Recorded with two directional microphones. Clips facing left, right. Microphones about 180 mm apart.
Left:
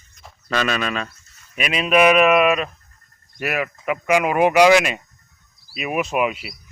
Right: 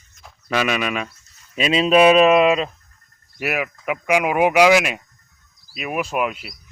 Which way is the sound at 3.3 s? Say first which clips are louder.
Even; 10° right (ahead or behind).